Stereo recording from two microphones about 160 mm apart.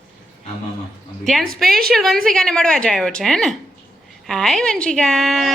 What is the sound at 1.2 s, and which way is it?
A woman's voice, centre (ahead or behind).